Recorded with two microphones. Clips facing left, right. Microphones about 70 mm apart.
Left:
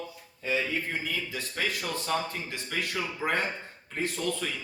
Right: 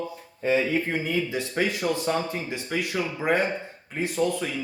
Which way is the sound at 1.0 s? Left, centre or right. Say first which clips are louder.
Right 7 dB; right.